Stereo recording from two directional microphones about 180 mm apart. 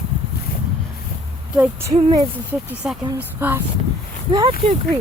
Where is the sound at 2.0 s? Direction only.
25° right (ahead or behind).